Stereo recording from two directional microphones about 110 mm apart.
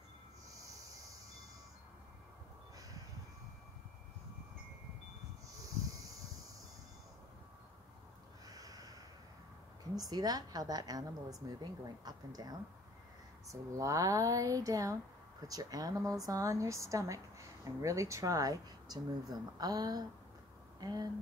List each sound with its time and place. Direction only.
5.6 s a sound: 35° right (ahead or behind)
8.5 s snort: 35° right (ahead or behind)
9.9 s a woman's voice: 35° right (ahead or behind)